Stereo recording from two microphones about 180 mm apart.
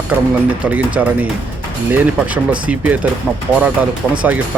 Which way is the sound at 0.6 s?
5° right (ahead or behind).